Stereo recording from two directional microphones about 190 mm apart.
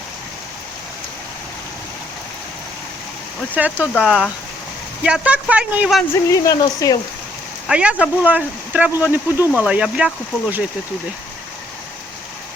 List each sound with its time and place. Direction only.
3.5 s speech: 10° right (ahead or behind)
6.2 s speech: 15° left (ahead or behind)
7.7 s speech: 5° right (ahead or behind)